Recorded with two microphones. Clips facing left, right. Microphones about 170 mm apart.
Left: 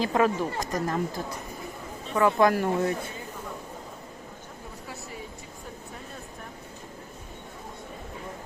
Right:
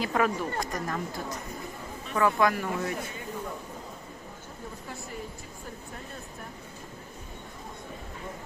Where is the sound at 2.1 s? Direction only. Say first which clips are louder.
Left 3 dB; 25° left (ahead or behind).